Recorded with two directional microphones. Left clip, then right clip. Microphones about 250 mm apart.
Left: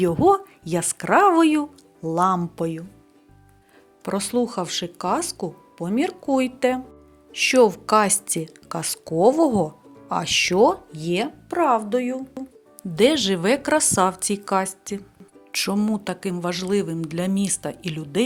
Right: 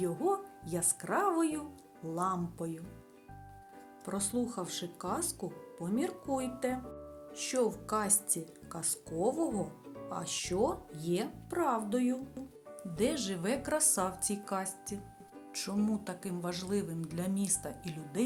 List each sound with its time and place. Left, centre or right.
0.0 s speech: right
4.0 s speech: right
13.0 s speech: right